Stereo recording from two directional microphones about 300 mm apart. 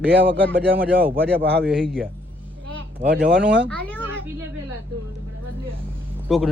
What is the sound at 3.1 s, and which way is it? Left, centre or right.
Speech, right.